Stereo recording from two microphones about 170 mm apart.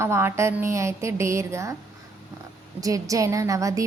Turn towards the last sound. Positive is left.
turn(degrees=-20)  # may be behind; listen again after turning